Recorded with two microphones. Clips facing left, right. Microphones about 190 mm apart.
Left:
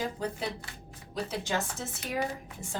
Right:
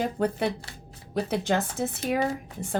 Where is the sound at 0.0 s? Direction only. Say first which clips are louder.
Right 7 dB; 60° right (ahead or behind).